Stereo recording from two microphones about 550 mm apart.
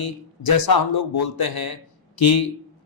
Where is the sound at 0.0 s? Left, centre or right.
Left.